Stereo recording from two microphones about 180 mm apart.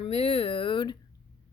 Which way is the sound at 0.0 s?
35° left (ahead or behind).